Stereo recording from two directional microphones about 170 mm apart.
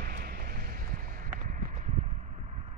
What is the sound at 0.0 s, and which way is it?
Clip-clop, 60° right (ahead or behind).